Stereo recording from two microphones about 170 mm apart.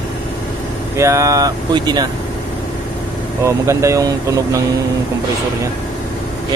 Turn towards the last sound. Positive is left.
turn(degrees=-20)  # may be behind; listen again after turning